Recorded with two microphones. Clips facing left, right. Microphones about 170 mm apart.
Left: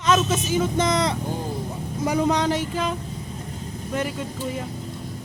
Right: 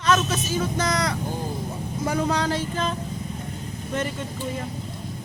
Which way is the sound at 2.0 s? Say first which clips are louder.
Left 3 dB; 15° left (ahead or behind).